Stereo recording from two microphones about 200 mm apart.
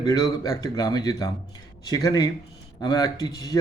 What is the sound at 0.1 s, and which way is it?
Speech, 15° left (ahead or behind).